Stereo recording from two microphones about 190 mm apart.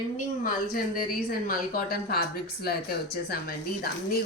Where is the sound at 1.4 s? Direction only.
50° left (ahead or behind).